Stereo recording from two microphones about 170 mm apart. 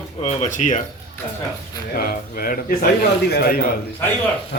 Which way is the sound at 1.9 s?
60° left (ahead or behind).